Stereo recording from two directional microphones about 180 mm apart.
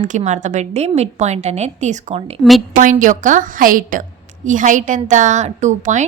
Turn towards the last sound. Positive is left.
turn(degrees=-40)  # may be behind; listen again after turning